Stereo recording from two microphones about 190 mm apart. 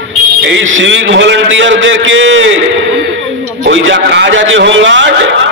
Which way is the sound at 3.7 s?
75° right (ahead or behind).